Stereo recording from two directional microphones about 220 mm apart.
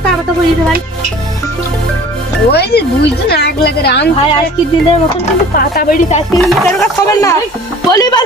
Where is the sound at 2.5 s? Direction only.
45° left (ahead or behind).